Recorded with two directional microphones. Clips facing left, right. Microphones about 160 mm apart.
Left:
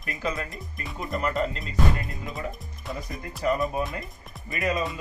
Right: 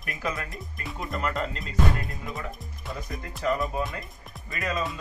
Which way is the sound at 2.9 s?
Centre (ahead or behind).